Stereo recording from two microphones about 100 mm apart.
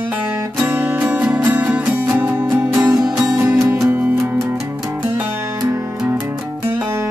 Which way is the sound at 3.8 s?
15° right (ahead or behind).